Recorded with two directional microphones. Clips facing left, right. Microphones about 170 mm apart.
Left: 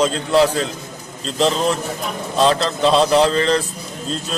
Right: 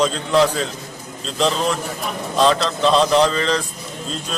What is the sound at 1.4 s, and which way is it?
A man's voice, centre (ahead or behind).